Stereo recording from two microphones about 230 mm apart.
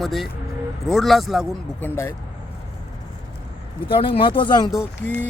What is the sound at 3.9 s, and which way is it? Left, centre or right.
Speech, left.